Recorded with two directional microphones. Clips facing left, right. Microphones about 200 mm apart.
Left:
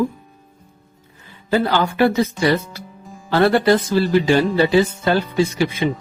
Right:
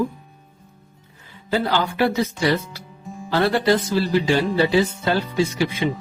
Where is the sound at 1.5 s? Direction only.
55° left (ahead or behind).